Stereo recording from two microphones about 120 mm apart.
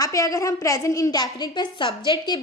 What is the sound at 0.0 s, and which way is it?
A woman's voice, 30° left (ahead or behind).